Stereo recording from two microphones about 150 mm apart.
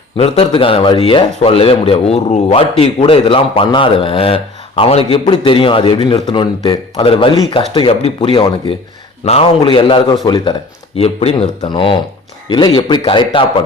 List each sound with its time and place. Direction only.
0.2 s a man's voice: 35° left (ahead or behind)